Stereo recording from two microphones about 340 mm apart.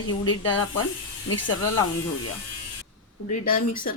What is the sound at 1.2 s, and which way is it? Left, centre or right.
Speech, left.